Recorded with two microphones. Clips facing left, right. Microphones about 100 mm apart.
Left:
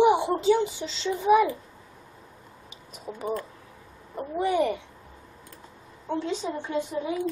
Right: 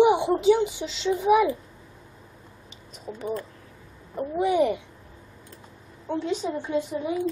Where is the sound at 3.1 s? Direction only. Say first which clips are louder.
Right 1 dB; 20° left (ahead or behind).